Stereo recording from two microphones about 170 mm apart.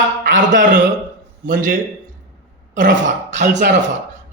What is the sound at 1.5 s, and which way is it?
Speech, 50° right (ahead or behind).